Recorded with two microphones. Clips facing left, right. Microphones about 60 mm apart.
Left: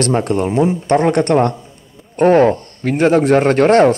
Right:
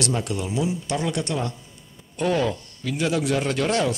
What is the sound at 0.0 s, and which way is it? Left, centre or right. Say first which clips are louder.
A man's voice: left 11 dB; left.